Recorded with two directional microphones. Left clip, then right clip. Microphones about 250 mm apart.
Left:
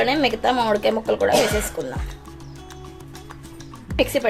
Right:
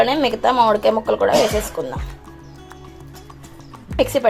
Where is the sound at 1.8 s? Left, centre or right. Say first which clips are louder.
Right 3 dB; right.